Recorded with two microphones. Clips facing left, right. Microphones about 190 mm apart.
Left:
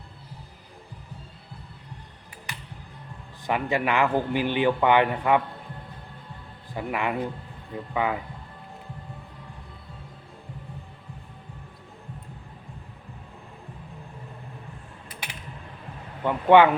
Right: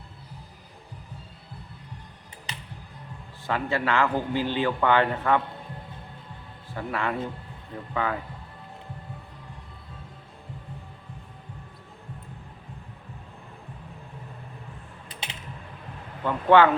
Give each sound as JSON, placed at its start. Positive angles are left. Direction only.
{"t": 2.5, "sound": "music", "side_deg": -20}
{"t": 3.4, "sound": "a man's voice", "side_deg": 15}
{"t": 6.7, "sound": "a man's voice", "side_deg": 15}
{"t": 15.1, "sound": "typing", "side_deg": -25}
{"t": 16.2, "sound": "a man's voice", "side_deg": 15}